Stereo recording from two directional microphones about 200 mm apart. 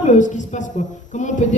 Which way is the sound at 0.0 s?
35° left (ahead or behind).